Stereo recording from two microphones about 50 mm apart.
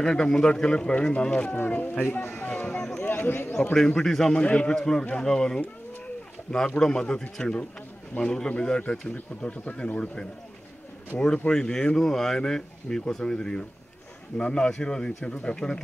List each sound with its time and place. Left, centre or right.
0.0 s speech: centre
1.7 s speech: left
2.3 s speech: left
3.0 s a man's voice: left
3.7 s speech: centre
4.4 s speech: left
4.7 s speech: centre
6.8 s speech: centre